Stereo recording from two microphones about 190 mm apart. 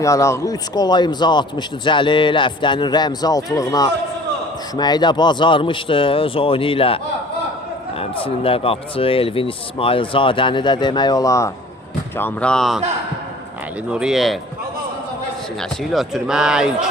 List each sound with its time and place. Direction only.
0.0 s speech: 15° left (ahead or behind); by 12.8 s centre (ahead or behind)
13.9 s speech: 5° right (ahead or behind)
15.8 s speech: centre (ahead or behind)